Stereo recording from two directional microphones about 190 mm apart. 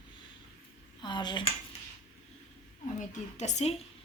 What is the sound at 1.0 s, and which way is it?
Speech, 25° left (ahead or behind).